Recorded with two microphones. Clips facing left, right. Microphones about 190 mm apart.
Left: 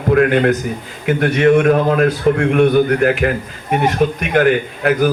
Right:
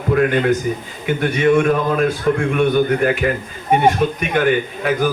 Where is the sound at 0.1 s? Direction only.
65° left (ahead or behind).